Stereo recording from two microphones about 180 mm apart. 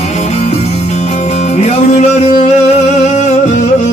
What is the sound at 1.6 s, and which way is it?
Music, 40° left (ahead or behind).